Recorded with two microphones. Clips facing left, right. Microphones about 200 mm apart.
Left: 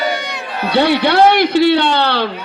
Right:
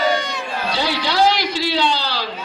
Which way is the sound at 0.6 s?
60° left (ahead or behind).